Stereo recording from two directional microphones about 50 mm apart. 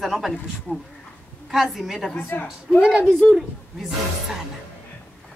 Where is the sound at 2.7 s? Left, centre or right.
Centre.